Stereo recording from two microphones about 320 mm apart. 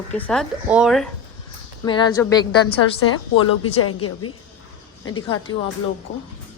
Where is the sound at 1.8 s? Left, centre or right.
Centre.